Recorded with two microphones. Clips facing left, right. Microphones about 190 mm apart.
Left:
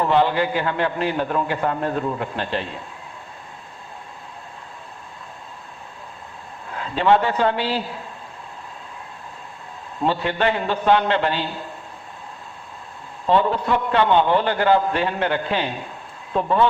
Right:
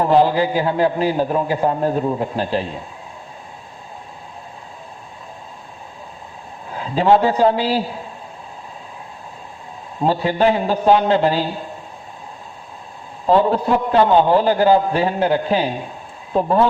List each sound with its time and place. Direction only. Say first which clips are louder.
0.0 s a man's voice: right 4 dB; 40° right (ahead or behind)
2.4 s a man's voice: right 5 dB; 5° right (ahead or behind)
6.9 s a man's voice: right 3 dB; 35° right (ahead or behind)
10.0 s a man's voice: right 4 dB; 35° right (ahead or behind)
13.2 s a man's voice: right 4 dB; 40° right (ahead or behind)